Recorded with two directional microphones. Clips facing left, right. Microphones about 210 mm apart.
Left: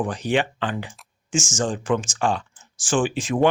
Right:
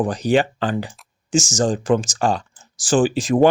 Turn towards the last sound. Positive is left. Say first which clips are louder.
# right 5 dB
turn(degrees=-40)  # may be behind; listen again after turning